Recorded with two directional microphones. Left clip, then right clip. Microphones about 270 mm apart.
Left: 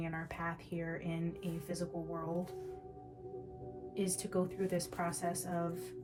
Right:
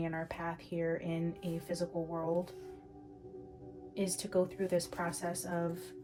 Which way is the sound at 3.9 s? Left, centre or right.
Right.